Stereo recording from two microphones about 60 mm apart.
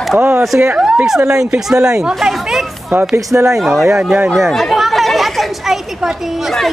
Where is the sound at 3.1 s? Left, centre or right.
Right.